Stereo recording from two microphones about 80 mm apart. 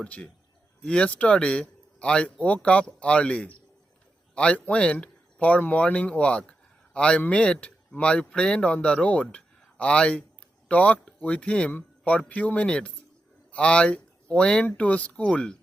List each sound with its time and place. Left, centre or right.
0.0 s a man's voice: centre
6.5 s a sound: centre
7.2 s a man's voice: centre